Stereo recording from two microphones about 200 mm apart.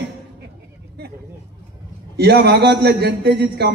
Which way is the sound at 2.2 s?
55° right (ahead or behind).